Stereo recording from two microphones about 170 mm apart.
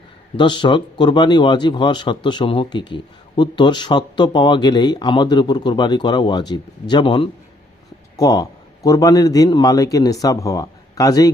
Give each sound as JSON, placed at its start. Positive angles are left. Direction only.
{"t": 0.3, "sound": "a man's voice", "side_deg": 25}